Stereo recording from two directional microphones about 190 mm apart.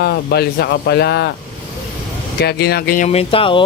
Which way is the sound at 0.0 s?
55° left (ahead or behind).